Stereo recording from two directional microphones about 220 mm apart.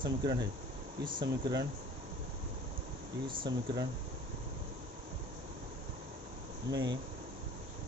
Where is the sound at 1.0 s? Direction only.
40° right (ahead or behind).